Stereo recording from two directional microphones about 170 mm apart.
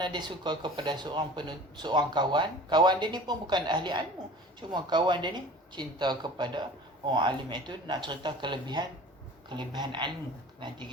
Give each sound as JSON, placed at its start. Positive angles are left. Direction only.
{"t": 0.0, "sound": "speech", "side_deg": -25}